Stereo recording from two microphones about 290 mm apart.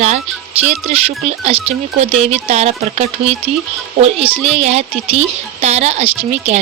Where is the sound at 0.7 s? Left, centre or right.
Right.